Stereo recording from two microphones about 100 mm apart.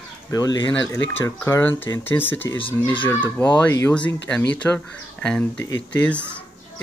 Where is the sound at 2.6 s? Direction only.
60° left (ahead or behind).